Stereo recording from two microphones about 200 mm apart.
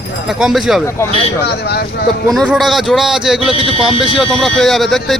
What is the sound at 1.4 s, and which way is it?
Speech, 55° left (ahead or behind).